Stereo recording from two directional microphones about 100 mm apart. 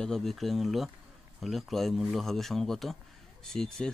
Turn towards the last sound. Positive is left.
turn(degrees=5)  # may be behind; listen again after turning